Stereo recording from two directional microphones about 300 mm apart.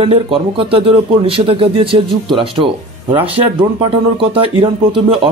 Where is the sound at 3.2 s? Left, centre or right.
Centre.